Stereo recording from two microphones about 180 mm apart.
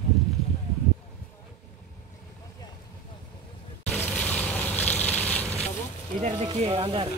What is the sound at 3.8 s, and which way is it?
Boat, 10° left (ahead or behind).